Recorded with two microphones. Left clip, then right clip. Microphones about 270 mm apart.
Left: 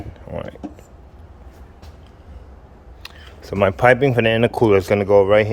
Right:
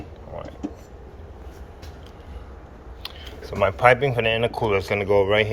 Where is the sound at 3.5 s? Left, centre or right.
Left.